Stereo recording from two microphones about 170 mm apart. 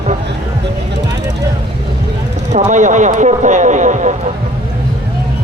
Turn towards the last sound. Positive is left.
turn(degrees=-45)  # may be behind; listen again after turning